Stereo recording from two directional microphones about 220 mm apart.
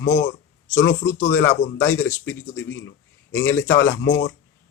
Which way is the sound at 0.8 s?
60° left (ahead or behind).